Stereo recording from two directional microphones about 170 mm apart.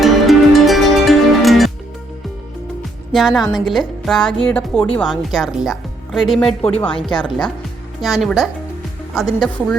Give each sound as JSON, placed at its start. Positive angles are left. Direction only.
{"t": 0.0, "sound": "music", "side_deg": 0}
{"t": 3.1, "sound": "a woman's voice", "side_deg": 0}
{"t": 6.7, "sound": "speech", "side_deg": 35}
{"t": 8.0, "sound": "a woman's voice", "side_deg": 0}